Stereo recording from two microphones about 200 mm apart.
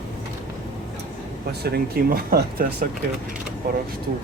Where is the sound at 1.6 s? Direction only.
50° right (ahead or behind).